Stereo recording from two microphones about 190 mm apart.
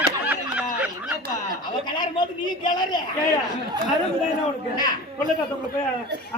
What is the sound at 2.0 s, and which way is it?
A man's voice, 25° left (ahead or behind).